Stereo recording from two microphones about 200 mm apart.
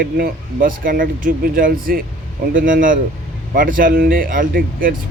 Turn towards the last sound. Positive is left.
turn(degrees=-45)  # may be behind; listen again after turning